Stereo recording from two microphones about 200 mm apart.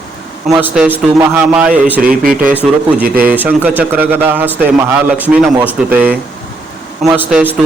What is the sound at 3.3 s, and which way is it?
Speech, 10° right (ahead or behind).